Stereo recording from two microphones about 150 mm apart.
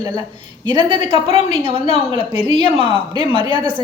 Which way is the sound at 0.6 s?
30° right (ahead or behind).